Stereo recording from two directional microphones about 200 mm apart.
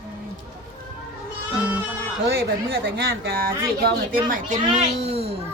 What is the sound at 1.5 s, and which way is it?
Goat, 5° right (ahead or behind).